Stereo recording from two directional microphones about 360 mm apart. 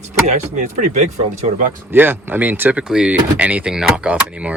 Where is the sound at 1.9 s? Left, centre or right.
Centre.